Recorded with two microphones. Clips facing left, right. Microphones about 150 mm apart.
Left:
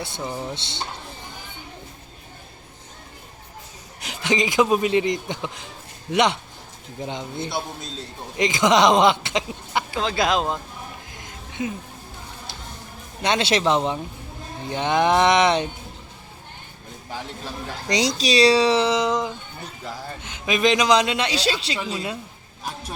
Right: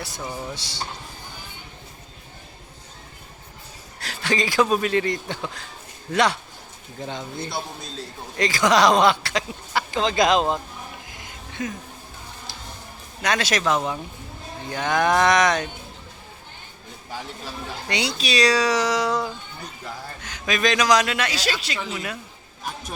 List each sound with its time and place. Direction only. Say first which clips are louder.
0.0 s speech: left 2 dB; 25° left (ahead or behind)
4.0 s speech: left 2 dB; 20° left (ahead or behind)
9.9 s speech: right 3 dB; 5° left (ahead or behind)
11.6 s speech: left 2 dB; 25° left (ahead or behind)
13.2 s speech: left 2 dB; 25° left (ahead or behind)
17.8 s speech: left 5 dB; 35° left (ahead or behind)